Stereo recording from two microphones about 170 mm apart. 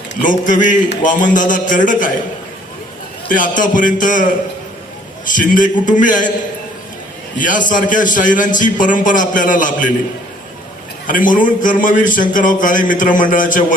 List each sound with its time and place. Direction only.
0.2 s a man's voice: 50° left (ahead or behind)
3.2 s a man's voice: 50° left (ahead or behind)
7.3 s a man's voice: 50° left (ahead or behind)
11.0 s a man's voice: 50° left (ahead or behind)